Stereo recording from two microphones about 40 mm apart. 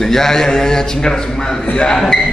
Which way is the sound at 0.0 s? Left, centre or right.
Centre.